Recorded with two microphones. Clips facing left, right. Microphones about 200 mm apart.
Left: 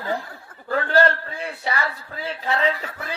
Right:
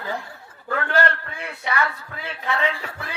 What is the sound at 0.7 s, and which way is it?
Chuckle, 35° left (ahead or behind).